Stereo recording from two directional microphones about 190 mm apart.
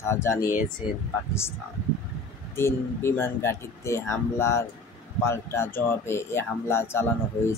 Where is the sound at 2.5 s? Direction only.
15° left (ahead or behind).